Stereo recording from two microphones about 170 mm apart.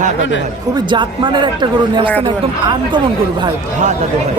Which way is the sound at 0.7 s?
30° right (ahead or behind).